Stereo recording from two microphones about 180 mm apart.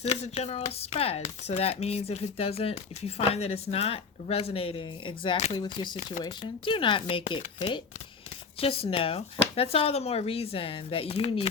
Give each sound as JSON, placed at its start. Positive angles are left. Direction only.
{"t": 0.0, "sound": "speech", "side_deg": 35}